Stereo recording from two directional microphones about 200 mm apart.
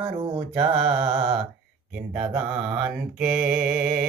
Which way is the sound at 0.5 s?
5° right (ahead or behind).